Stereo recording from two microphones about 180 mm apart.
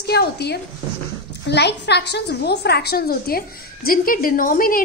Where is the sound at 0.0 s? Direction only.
65° left (ahead or behind).